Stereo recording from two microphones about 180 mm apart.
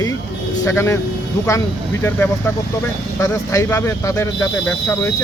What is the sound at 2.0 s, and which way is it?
Speech, 10° left (ahead or behind).